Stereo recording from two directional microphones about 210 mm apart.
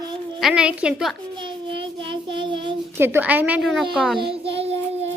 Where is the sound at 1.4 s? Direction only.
25° right (ahead or behind).